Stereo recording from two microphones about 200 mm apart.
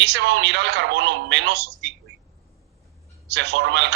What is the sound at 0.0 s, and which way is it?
A man's voice, 60° right (ahead or behind).